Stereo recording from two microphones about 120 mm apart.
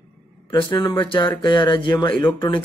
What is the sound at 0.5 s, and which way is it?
Speech, 40° left (ahead or behind).